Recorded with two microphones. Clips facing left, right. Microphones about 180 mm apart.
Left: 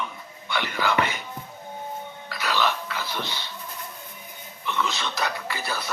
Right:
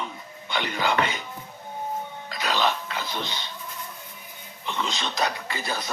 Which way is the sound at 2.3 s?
20° right (ahead or behind).